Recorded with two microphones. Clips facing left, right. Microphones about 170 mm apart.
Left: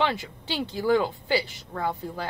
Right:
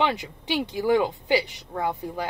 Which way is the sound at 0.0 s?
15° right (ahead or behind).